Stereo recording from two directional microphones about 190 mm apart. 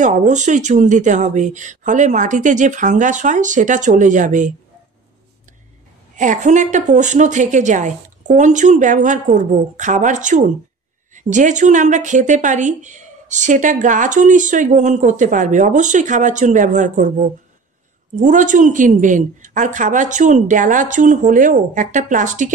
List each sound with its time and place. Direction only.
0.0 s speech: 40° right (ahead or behind)
6.1 s speech: 40° right (ahead or behind)